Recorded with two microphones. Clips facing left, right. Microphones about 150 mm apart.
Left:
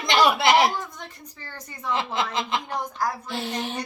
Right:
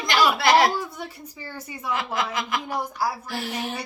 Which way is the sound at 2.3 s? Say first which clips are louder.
Left 1 dB; 25° left (ahead or behind).